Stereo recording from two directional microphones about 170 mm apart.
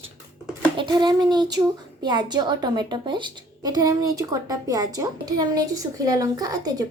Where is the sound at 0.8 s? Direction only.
25° right (ahead or behind).